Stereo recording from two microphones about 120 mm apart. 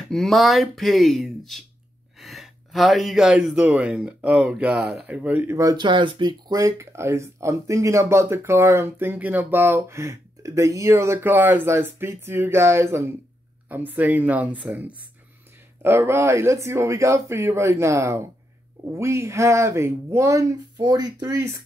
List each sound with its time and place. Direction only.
0.1 s speech: centre (ahead or behind); by 5.6 s 15° right (ahead or behind)
5.6 s speech: 30° right (ahead or behind)
5.9 s speech: 40° right (ahead or behind); by 21.6 s 25° right (ahead or behind)